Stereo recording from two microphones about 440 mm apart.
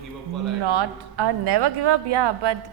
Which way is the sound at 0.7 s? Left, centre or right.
Right.